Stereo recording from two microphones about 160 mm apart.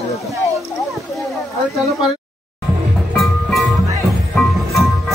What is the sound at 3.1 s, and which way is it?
Music, centre (ahead or behind).